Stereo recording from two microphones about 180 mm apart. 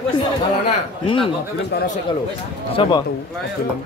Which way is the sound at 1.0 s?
30° left (ahead or behind).